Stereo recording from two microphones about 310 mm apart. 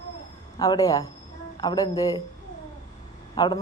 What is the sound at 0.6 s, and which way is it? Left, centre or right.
A man's voice, centre.